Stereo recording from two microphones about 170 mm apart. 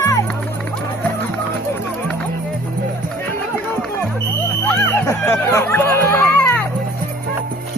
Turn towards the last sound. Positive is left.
turn(degrees=10)  # may be behind; listen again after turning